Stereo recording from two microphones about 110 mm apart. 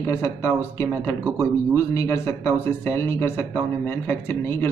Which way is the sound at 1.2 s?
25° right (ahead or behind).